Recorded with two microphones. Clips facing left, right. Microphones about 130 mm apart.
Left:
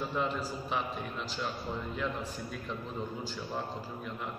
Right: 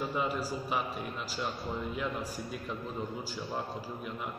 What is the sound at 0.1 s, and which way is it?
Speech, 5° right (ahead or behind).